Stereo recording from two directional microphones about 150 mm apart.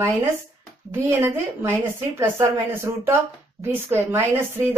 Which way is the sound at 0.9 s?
20° right (ahead or behind).